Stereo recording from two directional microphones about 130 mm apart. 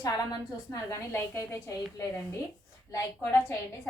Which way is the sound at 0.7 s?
25° left (ahead or behind).